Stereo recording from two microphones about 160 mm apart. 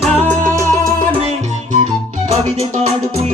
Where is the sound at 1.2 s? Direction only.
45° right (ahead or behind).